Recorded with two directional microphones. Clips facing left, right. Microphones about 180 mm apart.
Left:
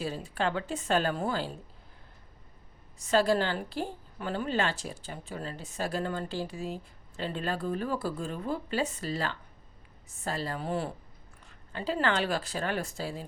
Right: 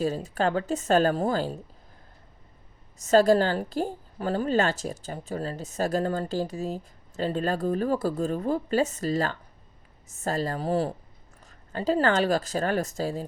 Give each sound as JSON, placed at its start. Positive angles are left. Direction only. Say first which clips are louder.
{"t": 0.0, "sound": "a woman's voice", "louder": "right 6 dB", "side_deg": -40}
{"t": 3.0, "sound": "a woman's voice", "louder": "right 6 dB", "side_deg": -45}